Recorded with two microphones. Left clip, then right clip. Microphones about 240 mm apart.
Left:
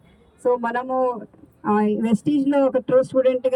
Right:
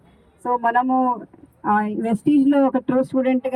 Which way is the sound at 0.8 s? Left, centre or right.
Centre.